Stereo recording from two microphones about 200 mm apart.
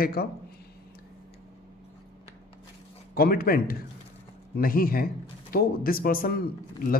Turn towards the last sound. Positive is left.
turn(degrees=45)  # may be behind; listen again after turning